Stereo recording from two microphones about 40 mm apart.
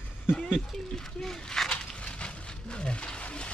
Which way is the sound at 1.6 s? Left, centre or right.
Centre.